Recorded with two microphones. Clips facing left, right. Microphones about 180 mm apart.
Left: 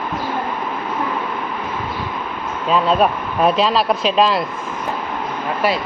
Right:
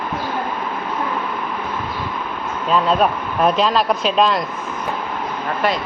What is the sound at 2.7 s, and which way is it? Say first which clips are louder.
Speech: left 1 dB; centre (ahead or behind).